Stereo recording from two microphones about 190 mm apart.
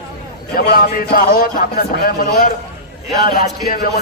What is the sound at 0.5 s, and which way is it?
Speech, 50° left (ahead or behind).